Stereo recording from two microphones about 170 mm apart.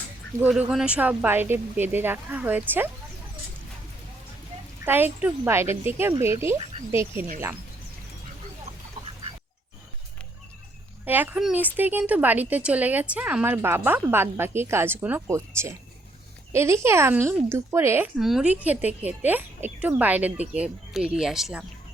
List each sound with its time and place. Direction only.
0.3 s speech: 55° right (ahead or behind)
0.7 s a woman's voice: 5° right (ahead or behind)
4.9 s a woman's voice: 10° right (ahead or behind)
11.0 s a woman's voice: 10° right (ahead or behind)
18.2 s a woman's voice: centre (ahead or behind)